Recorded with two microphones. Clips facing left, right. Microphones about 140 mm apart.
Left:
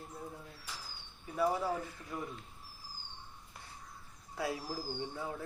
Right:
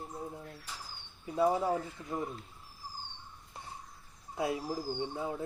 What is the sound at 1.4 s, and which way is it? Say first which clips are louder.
Speech: right 4 dB; 25° right (ahead or behind).